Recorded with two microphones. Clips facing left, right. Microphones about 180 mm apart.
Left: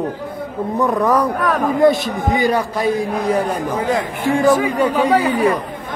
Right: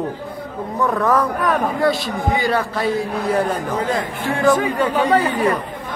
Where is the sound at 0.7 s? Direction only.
15° left (ahead or behind).